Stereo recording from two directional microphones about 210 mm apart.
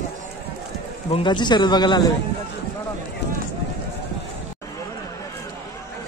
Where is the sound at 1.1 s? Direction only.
20° left (ahead or behind).